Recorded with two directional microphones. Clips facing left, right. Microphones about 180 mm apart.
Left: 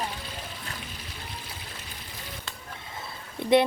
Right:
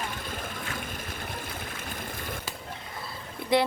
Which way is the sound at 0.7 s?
50° right (ahead or behind).